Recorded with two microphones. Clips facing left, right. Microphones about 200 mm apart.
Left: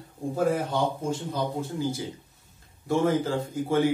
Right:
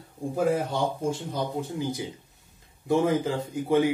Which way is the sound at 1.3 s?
15° right (ahead or behind).